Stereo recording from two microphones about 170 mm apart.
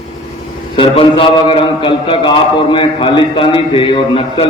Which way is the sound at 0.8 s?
30° left (ahead or behind).